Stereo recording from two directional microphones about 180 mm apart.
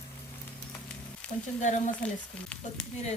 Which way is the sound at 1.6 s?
45° left (ahead or behind).